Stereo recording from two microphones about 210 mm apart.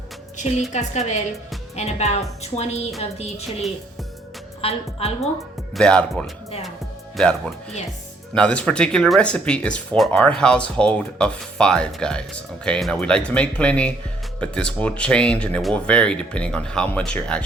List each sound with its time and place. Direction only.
0.7 s a woman's voice: 35° left (ahead or behind)
4.6 s a woman's voice: 30° left (ahead or behind)
5.7 s speech: 5° left (ahead or behind)